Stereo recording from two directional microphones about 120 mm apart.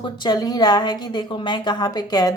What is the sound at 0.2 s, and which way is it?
A woman's voice, 35° left (ahead or behind).